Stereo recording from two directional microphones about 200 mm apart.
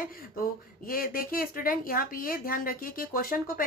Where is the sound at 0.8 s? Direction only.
45° left (ahead or behind).